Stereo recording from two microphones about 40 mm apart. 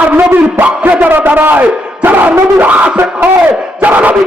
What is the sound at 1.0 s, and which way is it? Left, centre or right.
A man's voice, right.